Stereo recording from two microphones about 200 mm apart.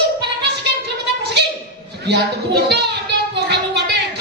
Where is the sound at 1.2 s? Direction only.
55° right (ahead or behind).